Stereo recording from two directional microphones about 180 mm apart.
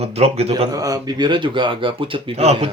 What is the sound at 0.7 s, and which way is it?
Speech, 20° right (ahead or behind).